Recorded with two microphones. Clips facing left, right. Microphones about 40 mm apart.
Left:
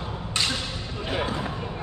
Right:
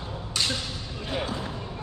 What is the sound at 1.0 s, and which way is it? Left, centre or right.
Basketball bounce, left.